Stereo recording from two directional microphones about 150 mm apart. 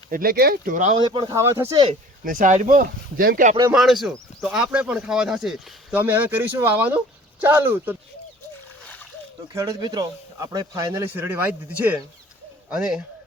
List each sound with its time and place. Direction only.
0.1 s speech: 75° right (ahead or behind); by 0.9 s 60° right (ahead or behind)
0.9 s speech: 30° right (ahead or behind)
2.2 s speech: 65° right (ahead or behind)
3.7 s speech: centre (ahead or behind)
9.6 s speech: 25° right (ahead or behind); by 13.0 s 5° right (ahead or behind)